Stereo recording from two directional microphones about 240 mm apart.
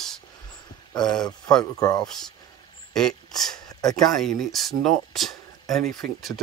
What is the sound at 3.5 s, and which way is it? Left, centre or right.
Speech, centre.